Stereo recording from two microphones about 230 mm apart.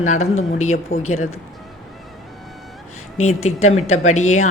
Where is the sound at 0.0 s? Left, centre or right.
Left.